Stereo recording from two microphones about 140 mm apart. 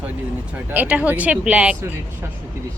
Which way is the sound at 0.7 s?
10° right (ahead or behind).